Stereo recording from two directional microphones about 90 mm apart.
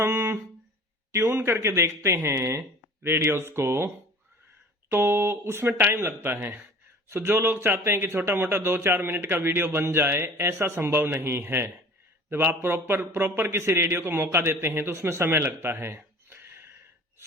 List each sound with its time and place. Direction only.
0.0 s a sound: 25° right (ahead or behind)
1.2 s speech: 20° right (ahead or behind)
1.5 s speech: 30° right (ahead or behind)